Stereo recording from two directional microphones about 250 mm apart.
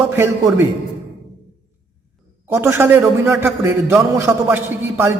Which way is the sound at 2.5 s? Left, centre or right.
Centre.